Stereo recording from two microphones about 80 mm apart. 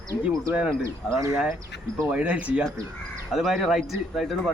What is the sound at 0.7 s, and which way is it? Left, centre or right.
Speech, right.